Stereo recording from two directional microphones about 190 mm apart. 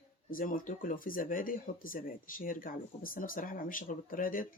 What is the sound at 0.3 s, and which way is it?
Speech, 45° left (ahead or behind).